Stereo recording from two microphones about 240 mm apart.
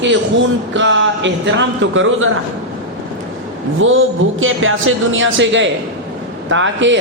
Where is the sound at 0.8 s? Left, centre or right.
Right.